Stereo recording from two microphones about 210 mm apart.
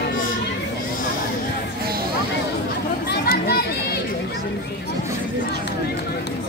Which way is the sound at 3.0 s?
50° left (ahead or behind).